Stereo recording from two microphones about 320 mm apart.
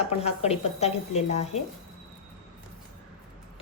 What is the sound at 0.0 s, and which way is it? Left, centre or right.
Speech, centre.